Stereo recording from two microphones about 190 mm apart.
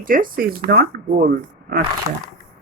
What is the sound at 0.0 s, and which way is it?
Speech, 45° right (ahead or behind).